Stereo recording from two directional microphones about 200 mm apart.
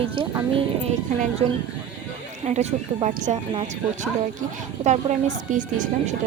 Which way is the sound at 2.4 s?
35° right (ahead or behind).